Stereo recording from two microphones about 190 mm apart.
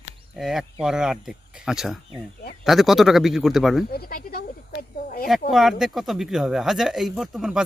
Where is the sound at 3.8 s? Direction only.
50° left (ahead or behind).